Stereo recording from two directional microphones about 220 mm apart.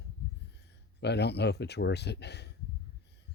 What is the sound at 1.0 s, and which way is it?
Speech, 50° left (ahead or behind).